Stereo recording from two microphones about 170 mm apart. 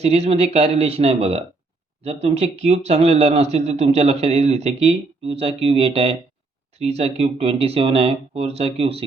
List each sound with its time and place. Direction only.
0.0 s speech: 40° right (ahead or behind)